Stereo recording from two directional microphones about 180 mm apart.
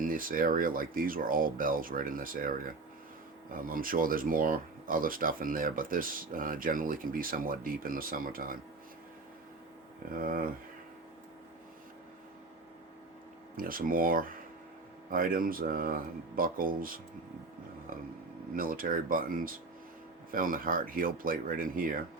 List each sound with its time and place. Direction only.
0.0 s speech: 50° right (ahead or behind)
3.5 s speech: 50° right (ahead or behind)
10.2 s speech: 50° right (ahead or behind)
13.6 s speech: 50° right (ahead or behind)
18.5 s speech: 50° right (ahead or behind)